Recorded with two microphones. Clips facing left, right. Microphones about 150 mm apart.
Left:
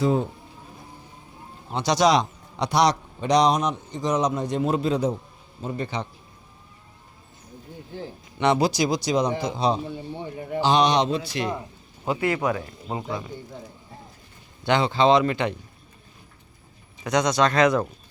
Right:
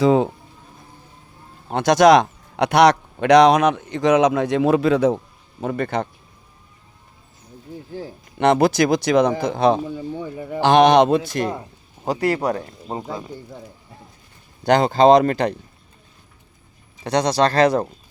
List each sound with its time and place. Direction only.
0.0 s speech: 90° right
1.7 s a man's voice: 55° right (ahead or behind)
7.9 s a man's voice: 45° right (ahead or behind)
14.6 s speech: 40° right (ahead or behind)
17.0 s speech: 35° right (ahead or behind)